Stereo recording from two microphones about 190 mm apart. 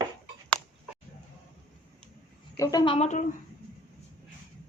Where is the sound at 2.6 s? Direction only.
20° left (ahead or behind); by 3.3 s 40° left (ahead or behind).